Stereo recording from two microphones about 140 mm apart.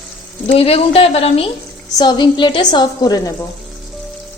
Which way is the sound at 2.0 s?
30° left (ahead or behind).